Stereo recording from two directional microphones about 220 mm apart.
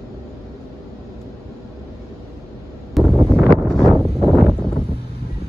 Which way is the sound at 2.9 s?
Centre (ahead or behind).